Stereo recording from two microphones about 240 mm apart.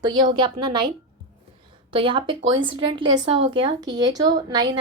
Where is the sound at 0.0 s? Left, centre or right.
Centre.